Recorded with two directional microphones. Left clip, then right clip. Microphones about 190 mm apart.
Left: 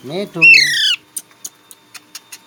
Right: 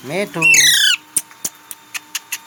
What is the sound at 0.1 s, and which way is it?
Speech, 5° left (ahead or behind).